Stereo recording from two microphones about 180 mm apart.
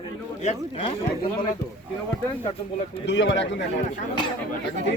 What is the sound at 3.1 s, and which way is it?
Speech, 85° left.